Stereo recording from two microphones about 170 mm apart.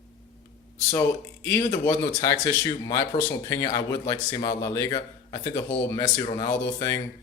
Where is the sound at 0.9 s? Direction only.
10° left (ahead or behind).